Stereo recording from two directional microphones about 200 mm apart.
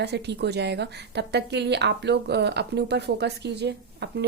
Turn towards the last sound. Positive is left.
turn(degrees=-60)  # may be behind; listen again after turning